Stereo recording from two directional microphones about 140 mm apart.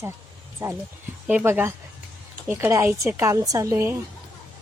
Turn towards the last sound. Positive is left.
turn(degrees=-20)  # may be behind; listen again after turning